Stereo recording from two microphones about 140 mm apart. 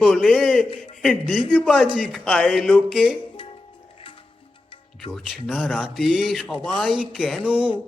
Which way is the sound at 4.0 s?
40° left (ahead or behind).